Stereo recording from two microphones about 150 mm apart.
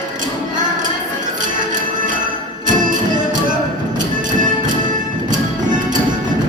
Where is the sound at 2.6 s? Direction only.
60° right (ahead or behind).